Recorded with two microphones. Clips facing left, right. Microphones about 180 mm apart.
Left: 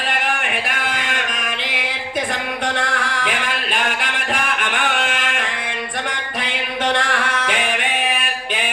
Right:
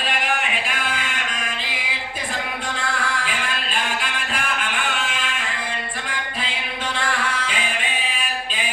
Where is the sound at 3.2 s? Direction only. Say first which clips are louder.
Left 4 dB; 65° left (ahead or behind).